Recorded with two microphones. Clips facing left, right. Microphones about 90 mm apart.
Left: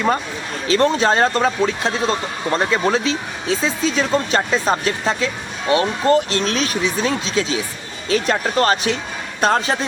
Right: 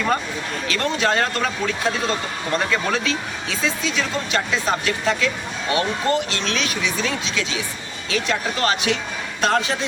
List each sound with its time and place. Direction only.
0.7 s speech: 30° left (ahead or behind)